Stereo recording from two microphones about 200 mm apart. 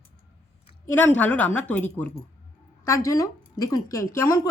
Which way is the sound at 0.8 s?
10° left (ahead or behind).